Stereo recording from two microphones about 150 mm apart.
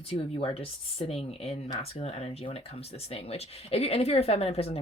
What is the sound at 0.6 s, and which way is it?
Speech, 40° left (ahead or behind).